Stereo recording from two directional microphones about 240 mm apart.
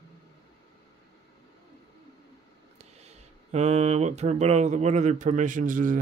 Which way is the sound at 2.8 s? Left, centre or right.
Right.